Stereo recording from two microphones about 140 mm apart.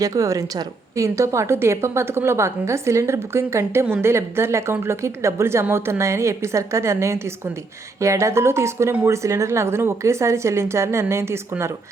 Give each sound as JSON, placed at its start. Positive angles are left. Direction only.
{"t": 0.0, "sound": "a woman's voice", "side_deg": -25}